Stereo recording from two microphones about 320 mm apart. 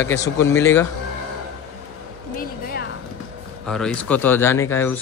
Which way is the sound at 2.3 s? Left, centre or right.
Left.